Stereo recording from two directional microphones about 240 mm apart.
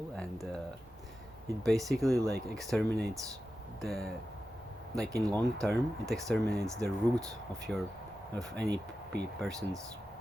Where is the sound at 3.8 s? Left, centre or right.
Centre.